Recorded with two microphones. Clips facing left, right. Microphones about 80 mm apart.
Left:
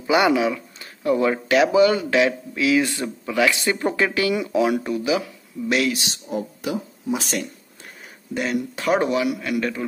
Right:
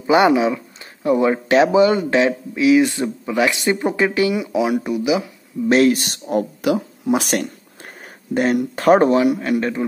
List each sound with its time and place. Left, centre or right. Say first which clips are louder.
0.0 s speech: right 4 dB; right
5.7 s speech: right 8 dB; right